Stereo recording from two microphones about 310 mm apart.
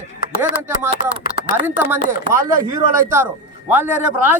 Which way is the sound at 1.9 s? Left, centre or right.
Centre.